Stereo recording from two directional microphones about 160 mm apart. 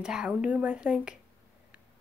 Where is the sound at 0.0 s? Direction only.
5° right (ahead or behind).